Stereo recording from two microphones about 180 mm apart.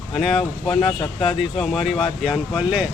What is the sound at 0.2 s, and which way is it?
Speech, centre (ahead or behind).